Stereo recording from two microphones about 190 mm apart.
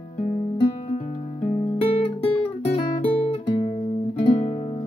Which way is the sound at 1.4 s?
35° left (ahead or behind).